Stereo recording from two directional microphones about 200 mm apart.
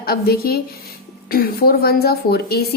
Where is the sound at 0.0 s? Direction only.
50° left (ahead or behind).